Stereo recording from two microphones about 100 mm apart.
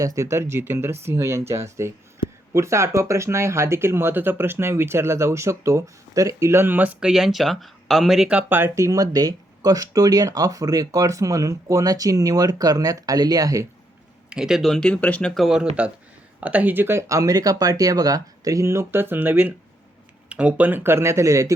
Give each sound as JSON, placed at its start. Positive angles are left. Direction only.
{"t": 0.0, "sound": "speech", "side_deg": -35}
{"t": 7.1, "sound": "speech", "side_deg": 0}
{"t": 14.3, "sound": "speech", "side_deg": -5}
{"t": 15.4, "sound": "speech", "side_deg": -5}